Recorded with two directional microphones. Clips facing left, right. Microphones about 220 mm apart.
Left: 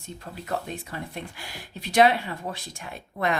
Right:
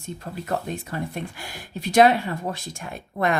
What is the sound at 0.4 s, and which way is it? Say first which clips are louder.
A woman's voice: right 3 dB; 45° right (ahead or behind).